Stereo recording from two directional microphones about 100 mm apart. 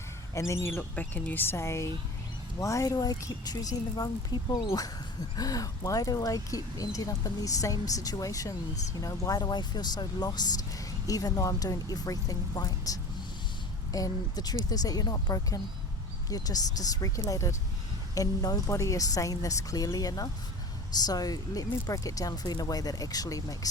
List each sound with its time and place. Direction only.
0.3 s speech: 30° left (ahead or behind)